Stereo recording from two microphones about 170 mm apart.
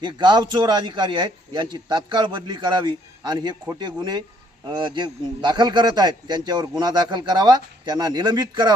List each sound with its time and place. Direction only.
0.0 s a man's voice: 25° right (ahead or behind)